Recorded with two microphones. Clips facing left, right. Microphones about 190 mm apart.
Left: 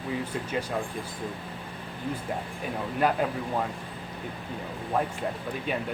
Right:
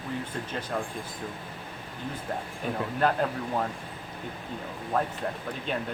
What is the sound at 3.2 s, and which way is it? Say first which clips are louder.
Speech: even; 10° left (ahead or behind).